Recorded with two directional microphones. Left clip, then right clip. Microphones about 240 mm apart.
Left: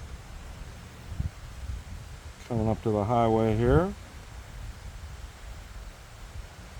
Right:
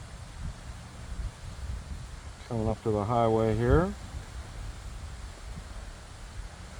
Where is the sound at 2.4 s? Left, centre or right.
Left.